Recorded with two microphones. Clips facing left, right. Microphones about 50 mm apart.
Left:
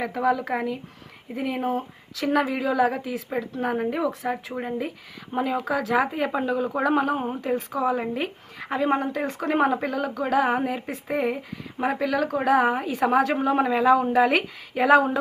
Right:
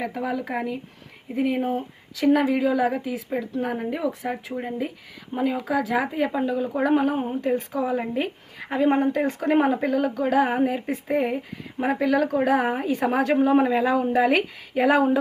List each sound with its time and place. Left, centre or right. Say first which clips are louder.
0.0 s a woman's voice: left 4 dB; centre
3.5 s a woman's voice: left 4 dB; centre